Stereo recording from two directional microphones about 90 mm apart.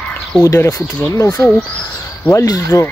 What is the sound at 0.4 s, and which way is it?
Speech, 35° left (ahead or behind).